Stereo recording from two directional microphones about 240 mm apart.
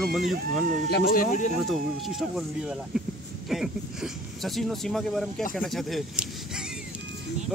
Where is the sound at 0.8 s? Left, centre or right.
Left.